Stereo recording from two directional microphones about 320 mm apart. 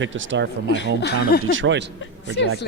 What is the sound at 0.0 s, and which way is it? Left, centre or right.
Speech, right.